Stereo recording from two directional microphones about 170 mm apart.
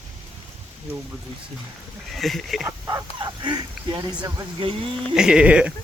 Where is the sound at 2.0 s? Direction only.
Centre (ahead or behind).